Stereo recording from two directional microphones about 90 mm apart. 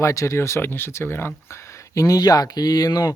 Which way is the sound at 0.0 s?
35° left (ahead or behind).